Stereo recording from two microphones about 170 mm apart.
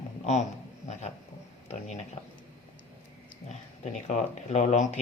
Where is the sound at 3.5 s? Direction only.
40° left (ahead or behind).